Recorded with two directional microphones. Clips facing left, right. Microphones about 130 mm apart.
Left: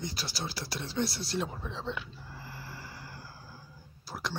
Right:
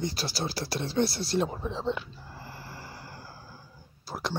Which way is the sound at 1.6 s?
30° right (ahead or behind).